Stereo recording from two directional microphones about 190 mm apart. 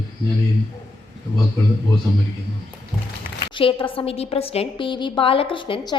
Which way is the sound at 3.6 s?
25° left (ahead or behind).